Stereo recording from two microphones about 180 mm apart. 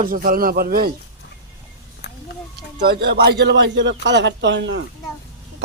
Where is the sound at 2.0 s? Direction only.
75° left (ahead or behind).